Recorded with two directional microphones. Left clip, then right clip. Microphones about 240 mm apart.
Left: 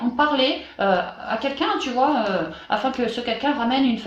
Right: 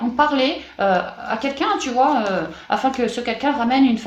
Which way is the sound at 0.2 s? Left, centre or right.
Right.